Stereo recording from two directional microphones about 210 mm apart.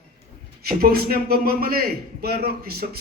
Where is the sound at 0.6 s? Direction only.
45° right (ahead or behind).